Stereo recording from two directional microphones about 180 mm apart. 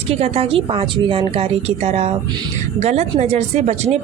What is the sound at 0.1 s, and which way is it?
A woman's voice, 35° right (ahead or behind).